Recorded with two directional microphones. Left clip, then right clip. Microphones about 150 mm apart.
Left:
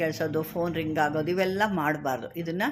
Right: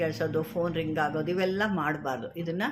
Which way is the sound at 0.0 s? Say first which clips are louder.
Left 1 dB; 35° left (ahead or behind).